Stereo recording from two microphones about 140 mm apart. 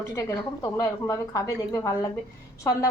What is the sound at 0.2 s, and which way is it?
A woman's voice, 25° left (ahead or behind).